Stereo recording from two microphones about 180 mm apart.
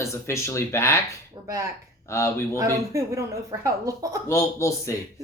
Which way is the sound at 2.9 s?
15° right (ahead or behind).